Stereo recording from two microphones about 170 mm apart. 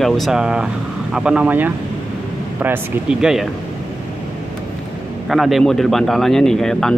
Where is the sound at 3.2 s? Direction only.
Centre (ahead or behind).